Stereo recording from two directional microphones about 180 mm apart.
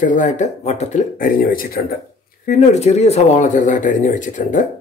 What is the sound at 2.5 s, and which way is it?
Speech, 40° left (ahead or behind).